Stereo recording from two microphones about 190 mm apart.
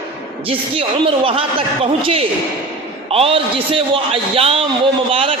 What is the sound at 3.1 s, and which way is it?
A man's voice, 30° right (ahead or behind).